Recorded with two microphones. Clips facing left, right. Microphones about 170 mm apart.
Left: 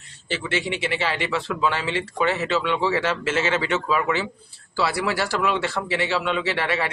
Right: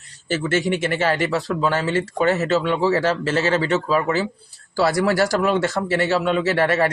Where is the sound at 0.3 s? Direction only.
45° right (ahead or behind).